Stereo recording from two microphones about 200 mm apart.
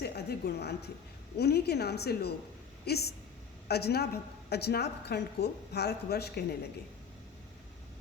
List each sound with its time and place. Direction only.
0.0 s a woman's voice: 55° left (ahead or behind)